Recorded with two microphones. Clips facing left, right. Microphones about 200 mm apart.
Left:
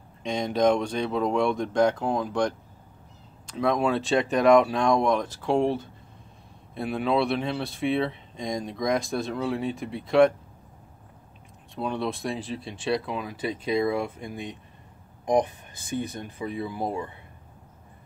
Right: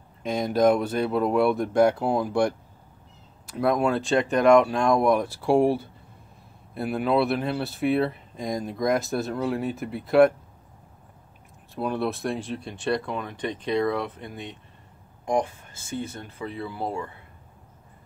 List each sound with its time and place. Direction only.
0.2 s speech: 5° right (ahead or behind)
11.7 s speech: 5° right (ahead or behind); by 17.1 s 15° left (ahead or behind)